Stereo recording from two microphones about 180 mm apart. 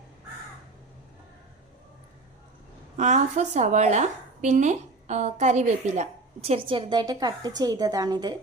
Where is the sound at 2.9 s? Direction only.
40° right (ahead or behind); by 8.4 s 20° right (ahead or behind).